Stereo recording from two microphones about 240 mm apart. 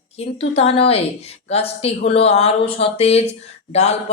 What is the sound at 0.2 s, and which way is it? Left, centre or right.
Speech, left.